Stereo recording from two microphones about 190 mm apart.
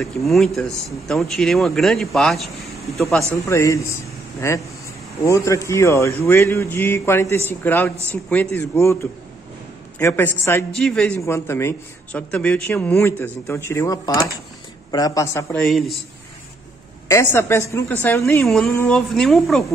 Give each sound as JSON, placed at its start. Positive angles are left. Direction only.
{"t": 0.0, "sound": "a man's voice", "side_deg": 0}
{"t": 3.4, "sound": "speech", "side_deg": 15}
{"t": 9.9, "sound": "speech", "side_deg": 10}
{"t": 11.1, "sound": "speech", "side_deg": 15}
{"t": 15.6, "sound": "a man's voice", "side_deg": 0}
{"t": 17.1, "sound": "a man's voice", "side_deg": 15}